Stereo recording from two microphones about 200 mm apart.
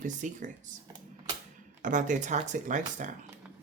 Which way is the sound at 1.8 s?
40° right (ahead or behind).